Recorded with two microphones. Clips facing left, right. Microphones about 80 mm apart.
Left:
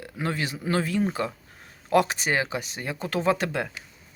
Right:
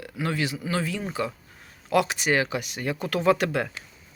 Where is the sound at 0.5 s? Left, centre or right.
Left.